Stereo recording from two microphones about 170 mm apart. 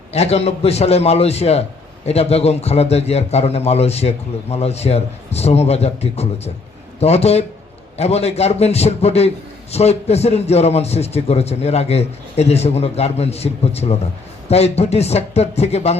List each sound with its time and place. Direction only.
0.1 s a man's voice: 40° left (ahead or behind)